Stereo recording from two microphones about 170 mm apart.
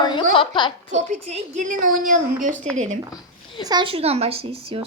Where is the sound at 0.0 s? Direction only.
25° left (ahead or behind).